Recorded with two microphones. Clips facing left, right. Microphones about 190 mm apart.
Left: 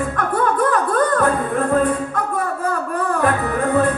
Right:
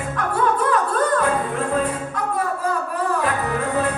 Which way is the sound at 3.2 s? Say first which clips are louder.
Left 4 dB; 50° left (ahead or behind).